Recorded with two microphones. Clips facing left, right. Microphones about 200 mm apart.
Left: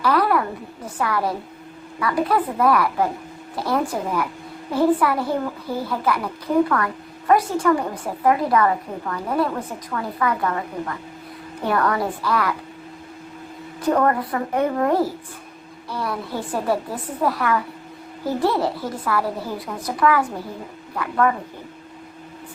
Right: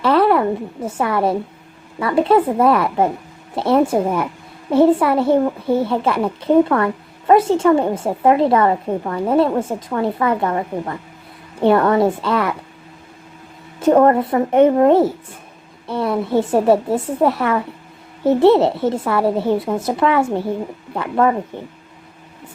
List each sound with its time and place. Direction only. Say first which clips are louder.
0.0 s a sound: right 5 dB; 25° right (ahead or behind)
0.9 s a child's voice: right 5 dB; 25° right (ahead or behind)
13.7 s a child's voice: right 7 dB; 25° right (ahead or behind)